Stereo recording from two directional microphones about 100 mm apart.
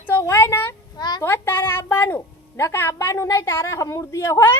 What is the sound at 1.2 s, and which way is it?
A woman's voice, 25° left (ahead or behind).